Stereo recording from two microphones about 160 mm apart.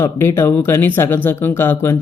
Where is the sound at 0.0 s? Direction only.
15° left (ahead or behind).